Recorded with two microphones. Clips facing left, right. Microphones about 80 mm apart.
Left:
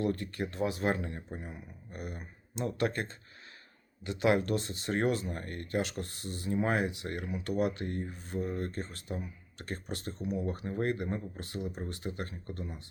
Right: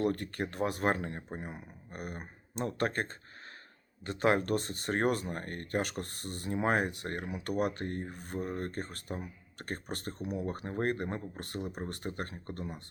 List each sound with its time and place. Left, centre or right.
0.0 s speech: right